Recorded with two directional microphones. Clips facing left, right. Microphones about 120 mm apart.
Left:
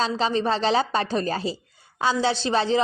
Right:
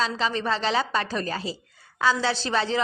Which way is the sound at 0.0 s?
30° left (ahead or behind).